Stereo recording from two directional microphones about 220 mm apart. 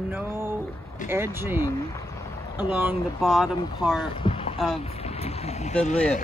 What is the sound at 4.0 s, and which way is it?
Boat, 25° left (ahead or behind).